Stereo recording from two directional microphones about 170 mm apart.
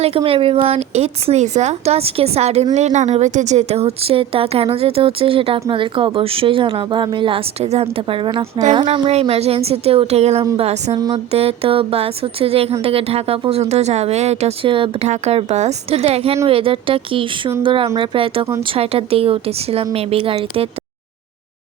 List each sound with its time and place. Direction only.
0.0 s a woman's voice: 35° right (ahead or behind)
10.9 s music: 25° right (ahead or behind)
11.3 s a woman's voice: 35° right (ahead or behind)